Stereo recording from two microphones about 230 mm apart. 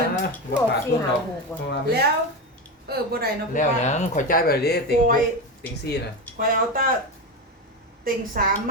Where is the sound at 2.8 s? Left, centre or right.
Right.